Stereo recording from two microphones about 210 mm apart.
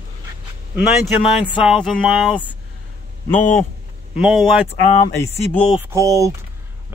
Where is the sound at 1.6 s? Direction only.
5° right (ahead or behind).